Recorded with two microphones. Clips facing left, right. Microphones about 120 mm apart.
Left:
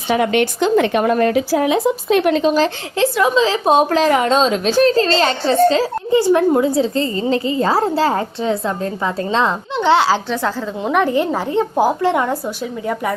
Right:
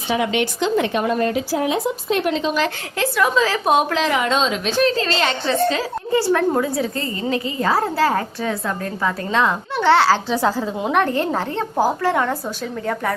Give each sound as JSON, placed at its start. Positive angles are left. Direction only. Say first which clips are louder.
{"t": 0.1, "sound": "speech", "louder": "left 4 dB", "side_deg": 50}
{"t": 2.6, "sound": "a woman's voice", "louder": "left 5 dB", "side_deg": 25}
{"t": 6.1, "sound": "a woman's voice", "louder": "left 4 dB", "side_deg": 20}
{"t": 10.2, "sound": "a woman's voice", "louder": "right 1 dB", "side_deg": -10}
{"t": 10.9, "sound": "a woman's voice", "louder": "left 3 dB", "side_deg": 10}